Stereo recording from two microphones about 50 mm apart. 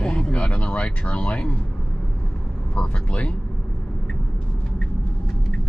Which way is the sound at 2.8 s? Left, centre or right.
Left.